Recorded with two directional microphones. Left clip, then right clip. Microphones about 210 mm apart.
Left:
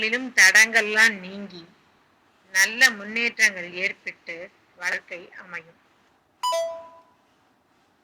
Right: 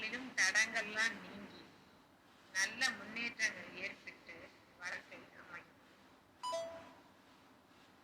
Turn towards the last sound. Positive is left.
turn(degrees=50)  # may be behind; listen again after turning